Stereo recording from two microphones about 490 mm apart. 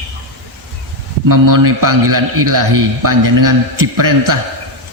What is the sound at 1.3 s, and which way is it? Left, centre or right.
A man's voice, right.